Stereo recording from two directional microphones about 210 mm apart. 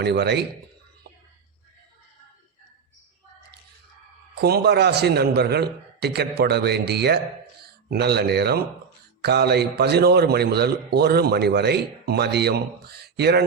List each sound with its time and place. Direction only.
0.0 s a man's voice: 50° right (ahead or behind)
4.4 s a man's voice: 50° right (ahead or behind)